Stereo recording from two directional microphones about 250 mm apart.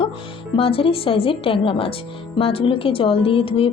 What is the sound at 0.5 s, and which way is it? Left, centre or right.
A woman's voice, left.